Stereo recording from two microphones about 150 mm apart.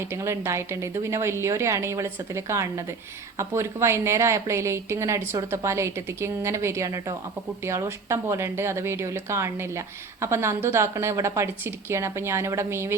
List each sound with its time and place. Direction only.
0.0 s a woman's voice: 15° right (ahead or behind)